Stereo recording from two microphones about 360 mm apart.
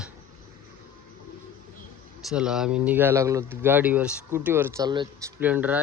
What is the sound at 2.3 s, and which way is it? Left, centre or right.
Speech, centre.